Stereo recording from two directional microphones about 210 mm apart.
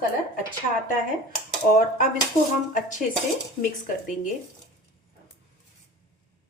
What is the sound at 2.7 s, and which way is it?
Speech, 35° left (ahead or behind).